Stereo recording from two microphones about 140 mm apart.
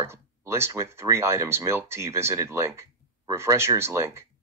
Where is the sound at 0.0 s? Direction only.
20° right (ahead or behind).